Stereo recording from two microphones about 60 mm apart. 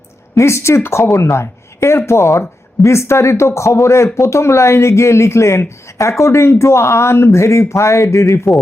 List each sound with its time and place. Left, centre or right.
0.3 s speech: left